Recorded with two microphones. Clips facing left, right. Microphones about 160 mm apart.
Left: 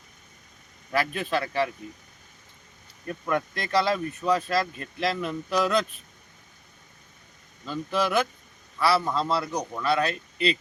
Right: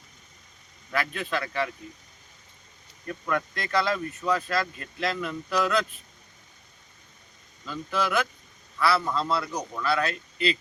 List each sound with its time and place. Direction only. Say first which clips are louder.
0.9 s speech: left 3 dB; 30° left (ahead or behind)
3.1 s speech: left 2 dB; 25° left (ahead or behind)
7.6 s speech: left 2 dB; 25° left (ahead or behind)